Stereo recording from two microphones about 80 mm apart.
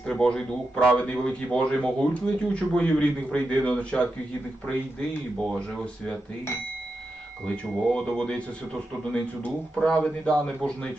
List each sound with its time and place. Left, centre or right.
0.0 s speech: centre
7.4 s speech: centre